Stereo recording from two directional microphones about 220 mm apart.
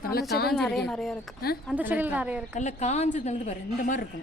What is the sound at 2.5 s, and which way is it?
Speech, 30° left (ahead or behind).